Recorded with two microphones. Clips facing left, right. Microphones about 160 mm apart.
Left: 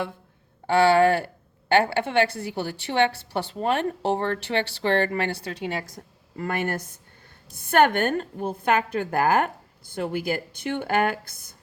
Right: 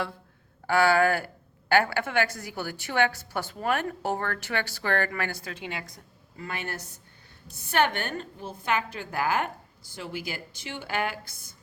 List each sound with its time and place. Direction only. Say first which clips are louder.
0.7 s a woman's voice: left 4 dB; 30° left (ahead or behind)
6.3 s a woman's voice: left 8 dB; 55° left (ahead or behind)